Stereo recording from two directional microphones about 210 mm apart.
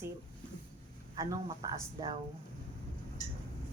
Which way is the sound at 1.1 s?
20° right (ahead or behind).